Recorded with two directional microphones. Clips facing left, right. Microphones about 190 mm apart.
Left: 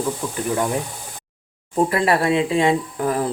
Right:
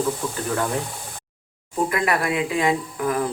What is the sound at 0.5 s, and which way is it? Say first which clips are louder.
Speech: left 3 dB; 15° left (ahead or behind).